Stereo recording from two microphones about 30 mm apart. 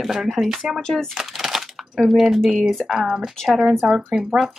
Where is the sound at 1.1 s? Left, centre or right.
Centre.